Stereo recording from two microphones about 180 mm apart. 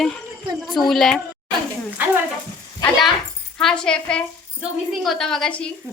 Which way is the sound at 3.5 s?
5° left (ahead or behind).